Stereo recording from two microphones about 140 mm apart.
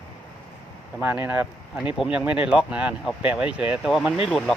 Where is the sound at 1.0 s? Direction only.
15° right (ahead or behind).